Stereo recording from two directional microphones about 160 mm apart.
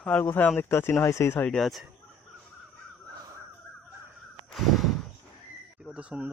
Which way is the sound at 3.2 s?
20° right (ahead or behind).